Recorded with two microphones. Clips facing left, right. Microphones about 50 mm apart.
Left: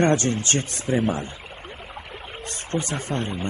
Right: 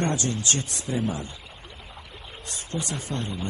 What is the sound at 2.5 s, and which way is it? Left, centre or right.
A man's voice, left.